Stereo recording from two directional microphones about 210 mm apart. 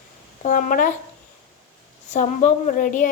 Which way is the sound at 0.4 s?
40° left (ahead or behind).